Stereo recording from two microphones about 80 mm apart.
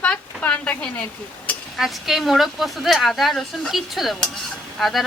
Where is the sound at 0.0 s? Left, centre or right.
Centre.